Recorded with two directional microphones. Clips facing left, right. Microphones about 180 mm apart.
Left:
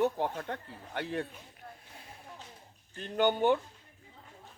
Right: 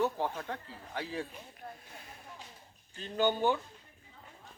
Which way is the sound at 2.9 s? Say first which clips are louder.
Left 2 dB; 60° left (ahead or behind).